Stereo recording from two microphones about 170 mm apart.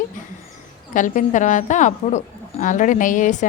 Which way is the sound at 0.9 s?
50° left (ahead or behind).